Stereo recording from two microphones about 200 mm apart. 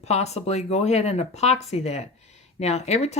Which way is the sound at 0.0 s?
35° left (ahead or behind).